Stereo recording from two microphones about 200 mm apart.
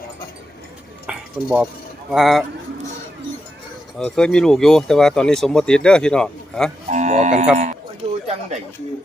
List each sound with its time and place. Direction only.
1.0 s stir: 5° right (ahead or behind)
2.0 s speech: centre (ahead or behind)
3.9 s speech: 5° left (ahead or behind)
6.8 s livestock: 35° right (ahead or behind)
7.5 s sheep: 35° right (ahead or behind)
8.3 s a sound: 35° right (ahead or behind)